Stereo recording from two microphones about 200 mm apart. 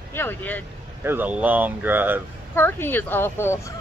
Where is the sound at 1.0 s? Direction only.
10° right (ahead or behind).